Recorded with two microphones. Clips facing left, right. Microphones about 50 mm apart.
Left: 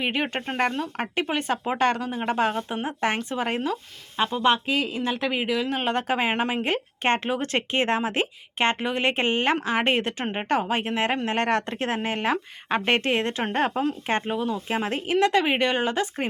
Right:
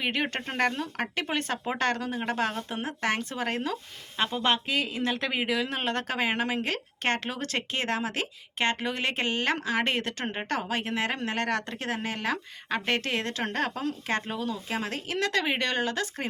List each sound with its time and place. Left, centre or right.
0.0 s speech: centre
4.7 s speech: centre; by 16.2 s left